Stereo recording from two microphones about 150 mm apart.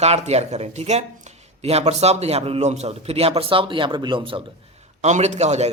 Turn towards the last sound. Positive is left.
turn(degrees=-45)  # may be behind; listen again after turning